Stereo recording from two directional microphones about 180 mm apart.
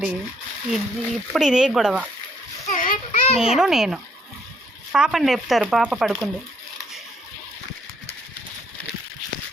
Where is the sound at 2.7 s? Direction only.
50° left (ahead or behind).